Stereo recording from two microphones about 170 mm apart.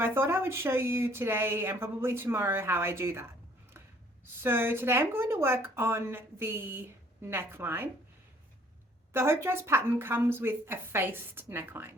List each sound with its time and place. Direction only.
0.0 s speech: 15° right (ahead or behind)
4.4 s speech: 15° right (ahead or behind)
9.1 s speech: 15° right (ahead or behind)